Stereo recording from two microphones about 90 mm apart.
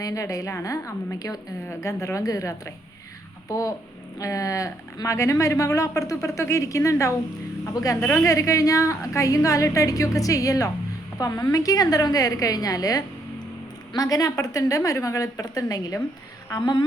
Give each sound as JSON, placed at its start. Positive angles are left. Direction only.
{"t": 0.0, "sound": "a woman's voice", "side_deg": 40}